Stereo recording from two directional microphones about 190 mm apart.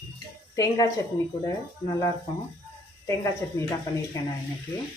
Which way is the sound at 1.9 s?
15° left (ahead or behind).